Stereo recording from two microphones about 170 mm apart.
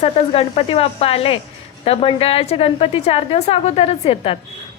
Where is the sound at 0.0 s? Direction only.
35° left (ahead or behind).